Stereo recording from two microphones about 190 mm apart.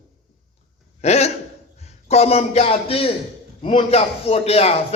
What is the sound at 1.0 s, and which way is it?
A man's voice, 35° left (ahead or behind).